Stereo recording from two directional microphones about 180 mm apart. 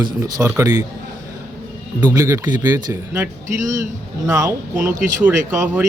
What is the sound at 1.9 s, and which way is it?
Speech, 15° right (ahead or behind).